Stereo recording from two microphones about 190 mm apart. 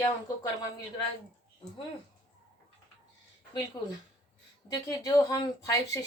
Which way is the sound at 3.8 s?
20° left (ahead or behind).